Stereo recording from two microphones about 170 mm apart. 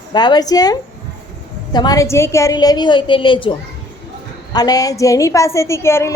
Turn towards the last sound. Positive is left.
turn(degrees=15)  # may be behind; listen again after turning